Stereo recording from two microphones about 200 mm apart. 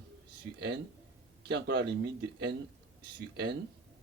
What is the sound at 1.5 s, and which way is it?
Speech, 55° right (ahead or behind).